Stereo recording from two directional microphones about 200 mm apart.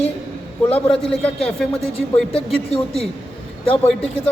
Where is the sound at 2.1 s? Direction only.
5° left (ahead or behind).